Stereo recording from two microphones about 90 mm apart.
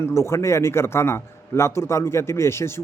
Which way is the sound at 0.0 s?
30° left (ahead or behind).